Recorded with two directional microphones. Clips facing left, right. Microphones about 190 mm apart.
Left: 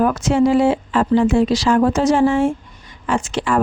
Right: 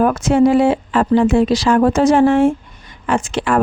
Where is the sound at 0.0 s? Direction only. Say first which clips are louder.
Right 3 dB; 55° right (ahead or behind).